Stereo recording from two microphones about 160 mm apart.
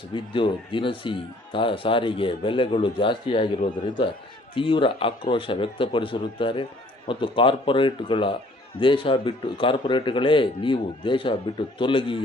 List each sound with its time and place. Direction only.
0.1 s speech: 30° left (ahead or behind)